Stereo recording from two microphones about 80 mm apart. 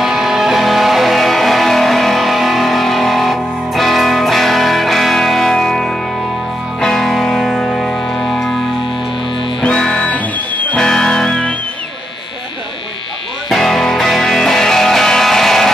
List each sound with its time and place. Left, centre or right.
0.0 s music: centre
9.6 s music: centre
10.8 s music: centre
13.5 s music: centre